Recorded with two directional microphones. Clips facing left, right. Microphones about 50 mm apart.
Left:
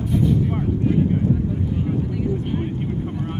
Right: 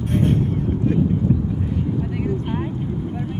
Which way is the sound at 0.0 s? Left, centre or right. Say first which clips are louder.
Even; right.